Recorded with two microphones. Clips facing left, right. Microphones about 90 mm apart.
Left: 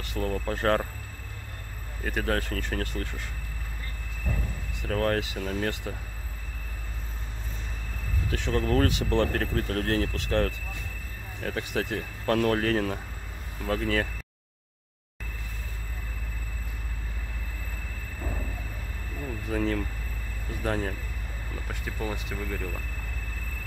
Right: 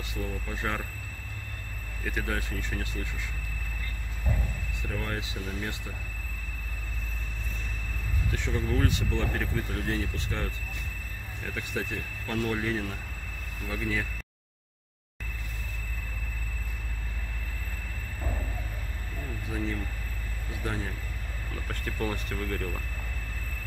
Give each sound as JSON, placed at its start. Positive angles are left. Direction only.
{"t": 0.1, "sound": "speech", "side_deg": 65}
{"t": 2.0, "sound": "speech", "side_deg": 50}
{"t": 4.8, "sound": "speech", "side_deg": 65}
{"t": 8.3, "sound": "speech", "side_deg": 85}
{"t": 11.4, "sound": "speech", "side_deg": 65}
{"t": 20.6, "sound": "speech", "side_deg": 45}
{"t": 21.6, "sound": "speech", "side_deg": 5}